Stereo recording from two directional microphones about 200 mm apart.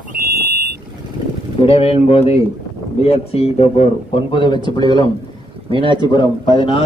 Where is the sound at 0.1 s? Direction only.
40° right (ahead or behind).